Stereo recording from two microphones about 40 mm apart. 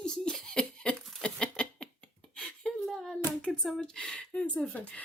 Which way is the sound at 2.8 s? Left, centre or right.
Centre.